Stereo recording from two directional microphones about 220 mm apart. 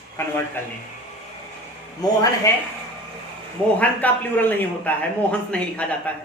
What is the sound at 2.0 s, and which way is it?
Speech, 15° left (ahead or behind).